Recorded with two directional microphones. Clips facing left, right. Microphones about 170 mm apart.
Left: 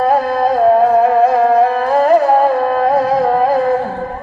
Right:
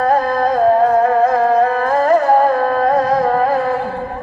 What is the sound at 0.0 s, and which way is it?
Carnatic music, 5° left (ahead or behind).